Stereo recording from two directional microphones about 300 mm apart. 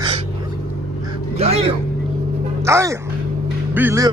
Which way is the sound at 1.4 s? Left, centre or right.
Centre.